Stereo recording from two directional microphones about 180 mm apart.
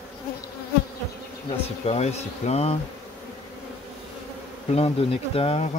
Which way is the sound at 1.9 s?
35° left (ahead or behind).